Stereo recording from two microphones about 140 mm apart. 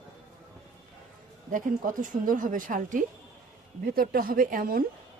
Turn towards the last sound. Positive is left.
turn(degrees=-90)